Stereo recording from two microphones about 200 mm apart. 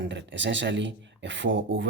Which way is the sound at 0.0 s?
65° right (ahead or behind).